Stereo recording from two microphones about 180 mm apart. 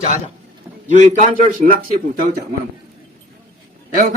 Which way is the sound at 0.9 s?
45° right (ahead or behind).